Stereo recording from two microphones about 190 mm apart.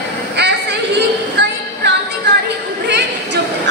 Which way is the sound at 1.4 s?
60° right (ahead or behind).